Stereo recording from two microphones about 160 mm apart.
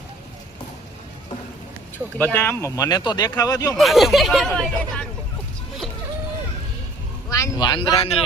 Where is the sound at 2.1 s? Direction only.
10° left (ahead or behind).